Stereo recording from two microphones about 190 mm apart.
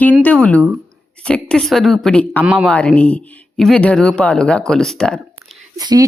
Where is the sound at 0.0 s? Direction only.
10° left (ahead or behind).